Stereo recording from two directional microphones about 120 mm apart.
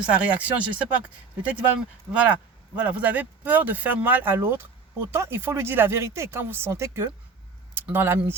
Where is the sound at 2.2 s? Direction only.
15° right (ahead or behind).